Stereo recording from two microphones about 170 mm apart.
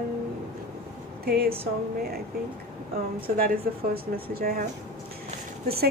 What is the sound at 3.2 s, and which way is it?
A woman's voice, 60° right (ahead or behind).